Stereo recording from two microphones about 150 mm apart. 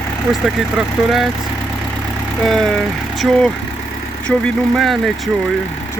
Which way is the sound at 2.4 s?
5° left (ahead or behind).